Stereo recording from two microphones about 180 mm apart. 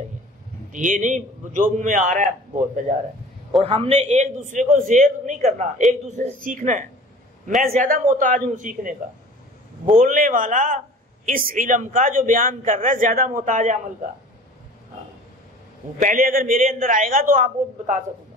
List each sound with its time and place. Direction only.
0.7 s a man's voice: 45° right (ahead or behind)
3.6 s a man's voice: 30° right (ahead or behind)
16.0 s a man's voice: 50° right (ahead or behind)